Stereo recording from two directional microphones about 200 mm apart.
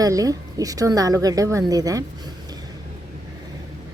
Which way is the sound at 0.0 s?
15° right (ahead or behind).